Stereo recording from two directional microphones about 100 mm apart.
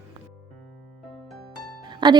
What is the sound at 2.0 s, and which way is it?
Speech, 55° right (ahead or behind).